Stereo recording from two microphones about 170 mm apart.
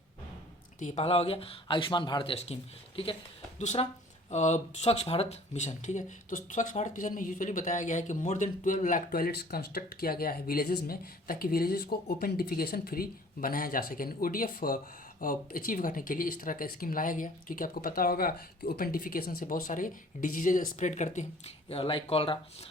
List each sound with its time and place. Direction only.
0.8 s speech: 40° left (ahead or behind)